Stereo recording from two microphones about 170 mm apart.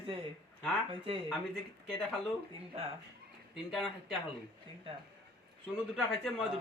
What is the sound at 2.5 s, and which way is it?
Speech, 35° right (ahead or behind).